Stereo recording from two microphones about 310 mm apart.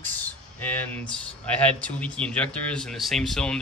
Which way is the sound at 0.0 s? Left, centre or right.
Centre.